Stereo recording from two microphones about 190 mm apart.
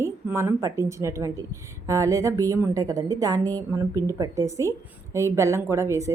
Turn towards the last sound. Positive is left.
turn(degrees=-15)  # may be behind; listen again after turning